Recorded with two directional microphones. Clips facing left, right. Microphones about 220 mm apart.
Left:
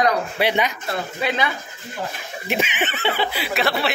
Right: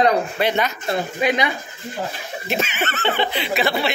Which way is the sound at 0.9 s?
15° right (ahead or behind).